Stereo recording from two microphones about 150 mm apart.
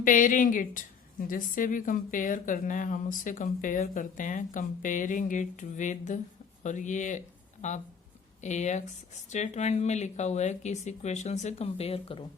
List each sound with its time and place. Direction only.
0.0 s a woman's voice: 60° left (ahead or behind); by 12.2 s 40° left (ahead or behind)